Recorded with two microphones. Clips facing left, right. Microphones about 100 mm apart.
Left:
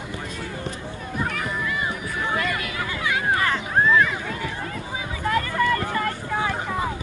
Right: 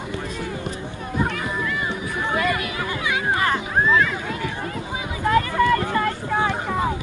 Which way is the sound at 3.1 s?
20° right (ahead or behind).